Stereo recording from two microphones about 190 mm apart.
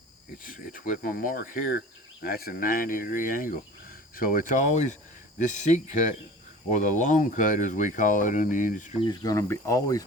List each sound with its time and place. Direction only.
0.4 s speech: 45° left (ahead or behind)
9.0 s speech: 20° left (ahead or behind)